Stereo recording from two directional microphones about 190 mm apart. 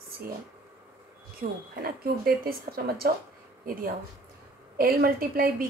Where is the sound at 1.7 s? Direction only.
55° right (ahead or behind).